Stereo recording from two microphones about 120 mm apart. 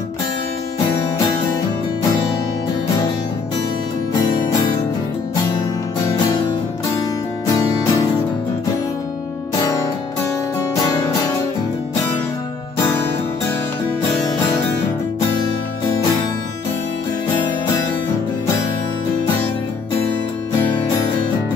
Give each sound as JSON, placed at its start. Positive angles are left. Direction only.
{"t": 4.2, "sound": "music", "side_deg": 35}
{"t": 7.4, "sound": "music", "side_deg": 30}
{"t": 9.6, "sound": "music", "side_deg": 30}
{"t": 10.9, "sound": "music", "side_deg": 35}